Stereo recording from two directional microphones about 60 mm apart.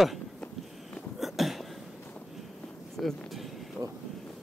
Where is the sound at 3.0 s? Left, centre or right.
Centre.